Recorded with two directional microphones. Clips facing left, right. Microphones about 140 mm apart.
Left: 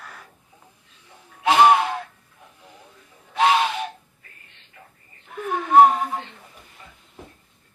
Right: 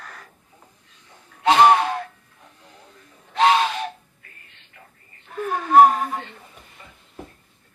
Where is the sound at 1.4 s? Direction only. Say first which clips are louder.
Right 1 dB; 10° left (ahead or behind).